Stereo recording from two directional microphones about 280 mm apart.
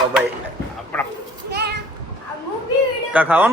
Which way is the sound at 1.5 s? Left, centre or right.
Right.